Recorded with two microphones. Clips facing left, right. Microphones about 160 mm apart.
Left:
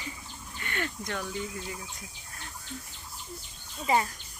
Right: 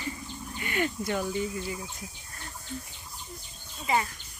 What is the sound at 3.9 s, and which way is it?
Speech, 40° left (ahead or behind).